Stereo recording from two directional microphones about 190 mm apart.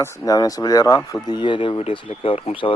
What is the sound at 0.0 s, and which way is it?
Speech, 15° left (ahead or behind).